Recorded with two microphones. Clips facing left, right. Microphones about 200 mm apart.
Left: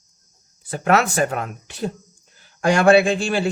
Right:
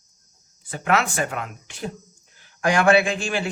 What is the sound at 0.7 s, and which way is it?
A man's voice, 40° left (ahead or behind).